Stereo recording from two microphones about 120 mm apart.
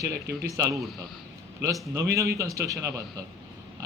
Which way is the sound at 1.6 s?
25° right (ahead or behind).